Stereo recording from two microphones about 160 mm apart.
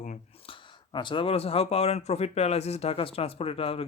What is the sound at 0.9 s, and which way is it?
Speech, 30° left (ahead or behind).